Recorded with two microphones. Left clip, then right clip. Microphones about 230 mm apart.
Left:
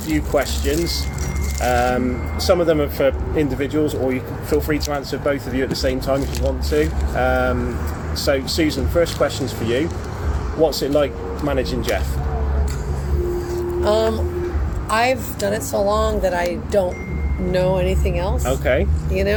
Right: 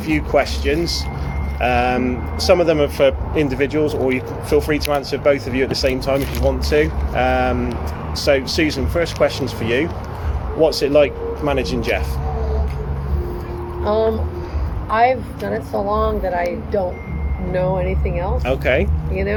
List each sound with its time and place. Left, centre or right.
0.1 s speech: right
13.8 s speech: left
18.4 s speech: right